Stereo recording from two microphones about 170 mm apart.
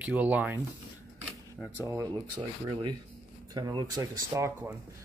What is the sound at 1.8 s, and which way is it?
Speech, 15° right (ahead or behind).